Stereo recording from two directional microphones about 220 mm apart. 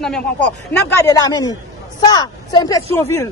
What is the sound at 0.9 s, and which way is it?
Speech, 15° left (ahead or behind).